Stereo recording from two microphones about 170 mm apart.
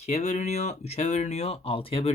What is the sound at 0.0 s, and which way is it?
Speech, 40° left (ahead or behind).